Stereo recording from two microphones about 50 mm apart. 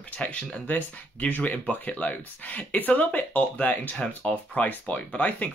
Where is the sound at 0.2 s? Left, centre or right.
Left.